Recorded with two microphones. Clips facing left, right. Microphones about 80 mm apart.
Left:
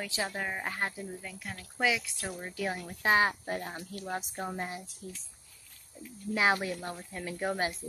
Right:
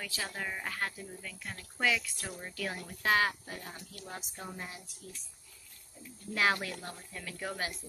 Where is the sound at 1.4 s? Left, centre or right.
Centre; by 3.4 s left.